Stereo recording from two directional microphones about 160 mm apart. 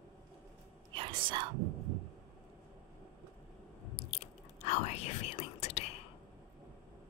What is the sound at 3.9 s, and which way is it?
Chewing, 40° left (ahead or behind).